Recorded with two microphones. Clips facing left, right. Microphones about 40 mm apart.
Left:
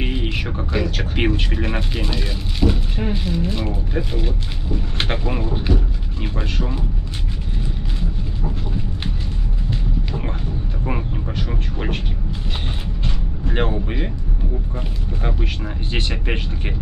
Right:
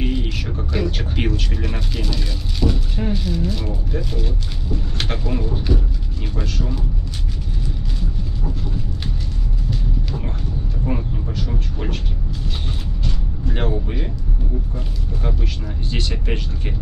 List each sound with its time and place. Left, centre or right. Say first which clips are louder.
0.0 s a sound: even; left
1.1 s speech: left 3 dB; left
9.7 s music: left 1 dB; left
10.9 s a sound: even; left
13.0 s vehicle: even; left
15.2 s speech: left 2 dB; left